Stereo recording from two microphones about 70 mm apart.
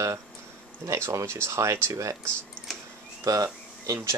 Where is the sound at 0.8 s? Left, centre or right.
Right.